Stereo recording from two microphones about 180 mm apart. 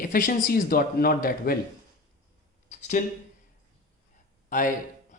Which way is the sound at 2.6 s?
40° left (ahead or behind).